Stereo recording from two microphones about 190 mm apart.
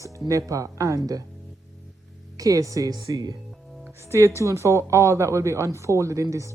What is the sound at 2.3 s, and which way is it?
Speech, 20° right (ahead or behind).